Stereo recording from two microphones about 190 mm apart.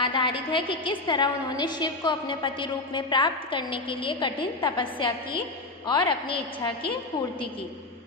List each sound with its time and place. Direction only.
0.0 s a woman's voice: 25° left (ahead or behind)